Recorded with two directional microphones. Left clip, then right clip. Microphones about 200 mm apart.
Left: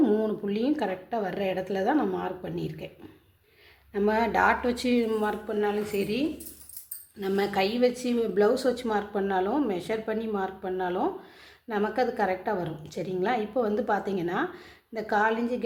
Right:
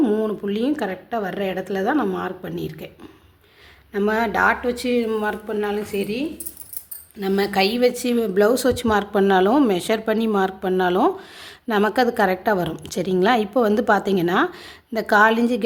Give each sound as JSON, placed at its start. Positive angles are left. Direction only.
{"t": 0.0, "sound": "a woman's voice", "side_deg": -15}
{"t": 3.9, "sound": "a woman's voice", "side_deg": -15}
{"t": 7.2, "sound": "a woman's voice", "side_deg": -30}